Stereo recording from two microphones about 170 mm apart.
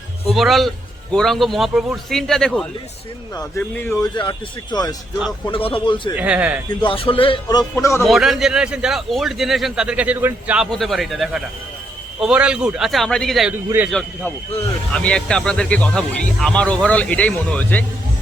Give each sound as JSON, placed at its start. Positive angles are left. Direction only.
{"t": 0.3, "sound": "a man's voice", "side_deg": 0}
{"t": 4.1, "sound": "speech", "side_deg": 25}
{"t": 6.1, "sound": "speech", "side_deg": -10}
{"t": 6.8, "sound": "speech", "side_deg": 35}
{"t": 8.0, "sound": "a man's voice", "side_deg": 0}
{"t": 13.7, "sound": "speech", "side_deg": -10}
{"t": 14.9, "sound": "speech", "side_deg": 5}